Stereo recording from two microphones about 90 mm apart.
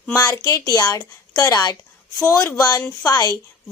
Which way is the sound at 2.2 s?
35° left (ahead or behind).